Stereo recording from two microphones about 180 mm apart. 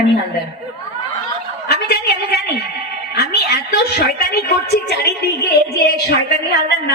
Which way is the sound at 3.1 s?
65° left (ahead or behind).